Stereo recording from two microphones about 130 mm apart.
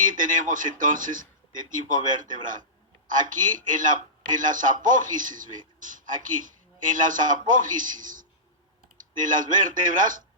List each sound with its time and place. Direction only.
0.0 s a man's voice: 90° right